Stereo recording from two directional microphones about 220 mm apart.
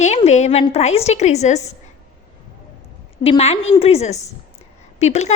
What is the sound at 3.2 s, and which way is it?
A woman's voice, 25° left (ahead or behind).